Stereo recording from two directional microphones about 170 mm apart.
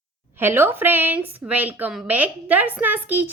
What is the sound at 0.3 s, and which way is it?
A woman's voice, 15° right (ahead or behind).